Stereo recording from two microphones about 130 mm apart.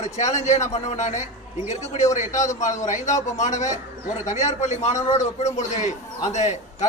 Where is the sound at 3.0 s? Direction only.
65° left (ahead or behind).